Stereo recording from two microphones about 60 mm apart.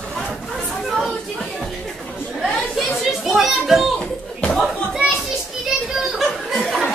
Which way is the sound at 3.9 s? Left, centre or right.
Centre.